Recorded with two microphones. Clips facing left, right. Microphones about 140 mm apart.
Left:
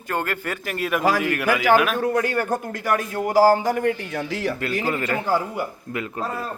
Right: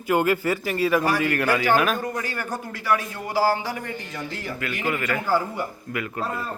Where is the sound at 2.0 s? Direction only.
60° left (ahead or behind).